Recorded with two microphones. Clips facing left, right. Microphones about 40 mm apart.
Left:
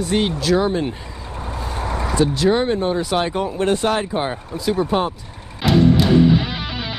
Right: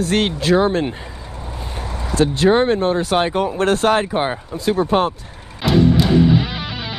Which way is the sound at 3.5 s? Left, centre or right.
Right.